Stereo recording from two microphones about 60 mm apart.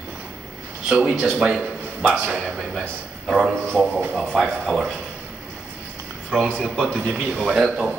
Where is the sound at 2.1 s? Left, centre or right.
Centre.